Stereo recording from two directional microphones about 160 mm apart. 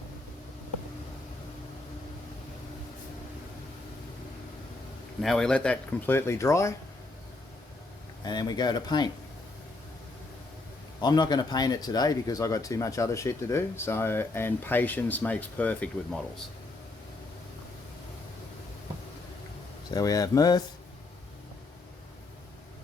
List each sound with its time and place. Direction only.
5.2 s speech: 5° left (ahead or behind)
8.2 s speech: 25° left (ahead or behind)
11.0 s speech: 25° left (ahead or behind); by 15.9 s 10° left (ahead or behind)
19.9 s speech: 20° left (ahead or behind)